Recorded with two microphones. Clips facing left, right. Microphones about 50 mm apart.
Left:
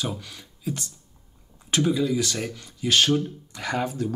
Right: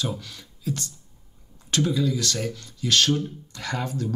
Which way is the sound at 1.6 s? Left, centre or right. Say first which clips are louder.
Left 1 dB; centre.